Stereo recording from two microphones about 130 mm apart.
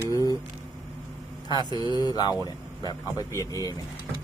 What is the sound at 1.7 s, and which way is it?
Speech, 30° left (ahead or behind).